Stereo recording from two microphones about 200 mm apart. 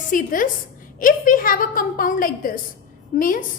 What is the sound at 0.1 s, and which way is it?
A woman's voice, 40° left (ahead or behind).